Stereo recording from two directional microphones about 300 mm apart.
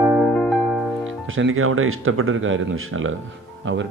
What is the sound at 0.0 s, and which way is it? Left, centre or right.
Music, centre.